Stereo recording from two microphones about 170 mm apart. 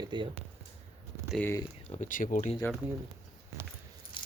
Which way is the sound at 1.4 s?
15° left (ahead or behind).